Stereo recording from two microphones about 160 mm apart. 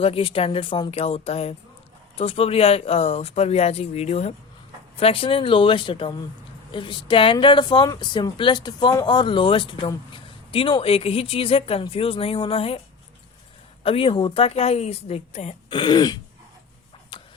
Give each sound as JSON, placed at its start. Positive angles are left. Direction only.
{"t": 0.0, "sound": "speech", "side_deg": 35}
{"t": 13.8, "sound": "speech", "side_deg": 35}
{"t": 15.7, "sound": "speech", "side_deg": 30}
{"t": 17.1, "sound": "a sound", "side_deg": 30}